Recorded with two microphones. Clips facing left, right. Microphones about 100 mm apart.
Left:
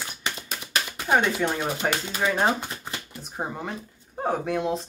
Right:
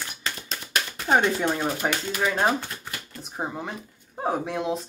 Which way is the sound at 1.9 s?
15° left (ahead or behind).